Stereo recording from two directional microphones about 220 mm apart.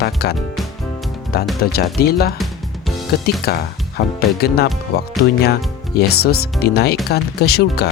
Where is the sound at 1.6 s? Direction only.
45° left (ahead or behind).